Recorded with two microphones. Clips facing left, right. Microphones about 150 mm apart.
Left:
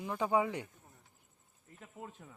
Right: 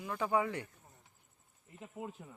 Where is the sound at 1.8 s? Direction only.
10° right (ahead or behind).